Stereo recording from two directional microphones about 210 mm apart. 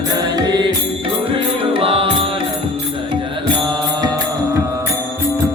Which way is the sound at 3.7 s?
20° right (ahead or behind).